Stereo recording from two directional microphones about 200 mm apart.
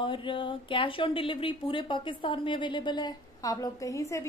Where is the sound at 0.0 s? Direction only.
25° left (ahead or behind).